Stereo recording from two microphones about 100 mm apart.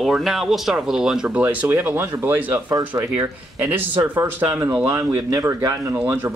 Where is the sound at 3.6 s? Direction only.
20° right (ahead or behind).